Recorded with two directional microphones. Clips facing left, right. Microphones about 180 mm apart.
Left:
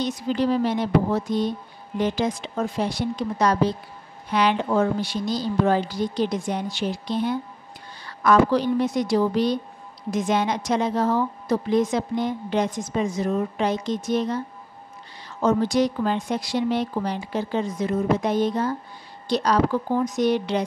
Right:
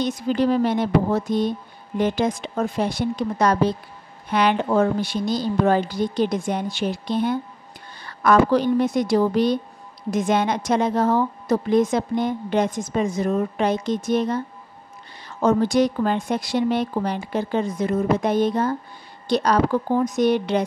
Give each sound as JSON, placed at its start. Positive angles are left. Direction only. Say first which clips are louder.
{"t": 0.0, "sound": "a woman's voice", "louder": "right 2 dB", "side_deg": -50}